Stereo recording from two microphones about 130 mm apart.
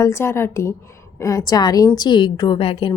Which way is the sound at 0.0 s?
20° left (ahead or behind).